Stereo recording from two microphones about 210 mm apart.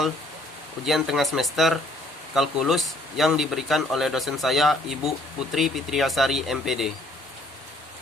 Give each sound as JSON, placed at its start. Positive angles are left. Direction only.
{"t": 0.9, "sound": "speech", "side_deg": 0}